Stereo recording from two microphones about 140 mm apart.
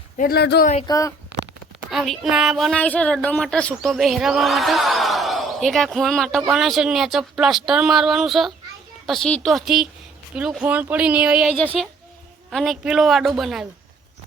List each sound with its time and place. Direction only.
0.2 s speech: 80° left
0.9 s a child's voice: 25° left (ahead or behind)
1.9 s speech: centre (ahead or behind)
2.8 s speech: 10° left (ahead or behind)